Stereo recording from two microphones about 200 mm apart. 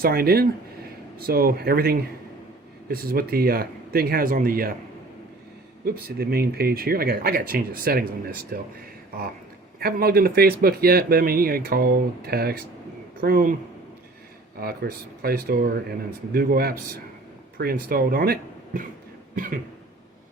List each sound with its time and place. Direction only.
0.0 s speech: 50° right (ahead or behind)
5.8 s speech: 50° right (ahead or behind)
9.8 s speech: 50° right (ahead or behind)
14.6 s speech: 50° right (ahead or behind)